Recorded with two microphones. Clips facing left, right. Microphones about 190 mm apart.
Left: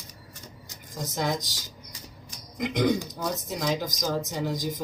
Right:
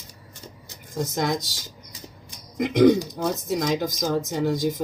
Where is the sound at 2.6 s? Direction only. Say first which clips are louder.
Right 8 dB; 50° right (ahead or behind).